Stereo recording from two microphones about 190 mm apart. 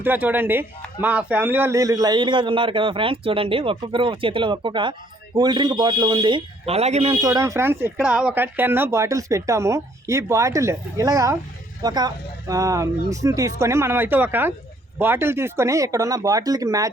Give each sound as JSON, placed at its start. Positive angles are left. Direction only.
{"t": 0.0, "sound": "a man's voice", "side_deg": -10}
{"t": 7.2, "sound": "speech", "side_deg": -20}